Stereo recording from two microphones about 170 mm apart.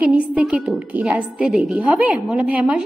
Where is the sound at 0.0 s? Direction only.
5° right (ahead or behind).